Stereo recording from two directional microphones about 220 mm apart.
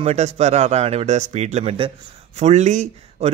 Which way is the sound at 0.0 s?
30° right (ahead or behind).